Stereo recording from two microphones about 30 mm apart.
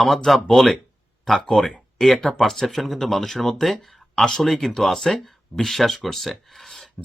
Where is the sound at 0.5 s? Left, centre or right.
Centre.